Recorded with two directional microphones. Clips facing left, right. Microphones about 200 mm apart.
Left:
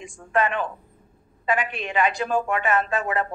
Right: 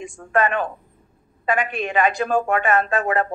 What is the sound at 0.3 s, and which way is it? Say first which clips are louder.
A woman's voice: right 3 dB; 50° right (ahead or behind).